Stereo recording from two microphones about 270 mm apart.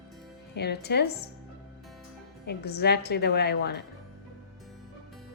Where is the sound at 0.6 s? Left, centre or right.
Left.